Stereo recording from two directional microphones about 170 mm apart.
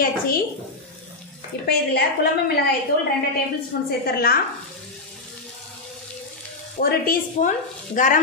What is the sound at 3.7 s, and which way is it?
Speech, 65° left (ahead or behind).